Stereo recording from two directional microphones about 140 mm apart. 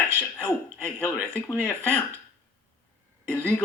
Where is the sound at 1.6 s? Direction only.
5° left (ahead or behind).